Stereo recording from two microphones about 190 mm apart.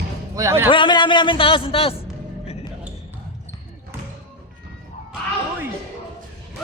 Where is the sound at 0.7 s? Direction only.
25° left (ahead or behind).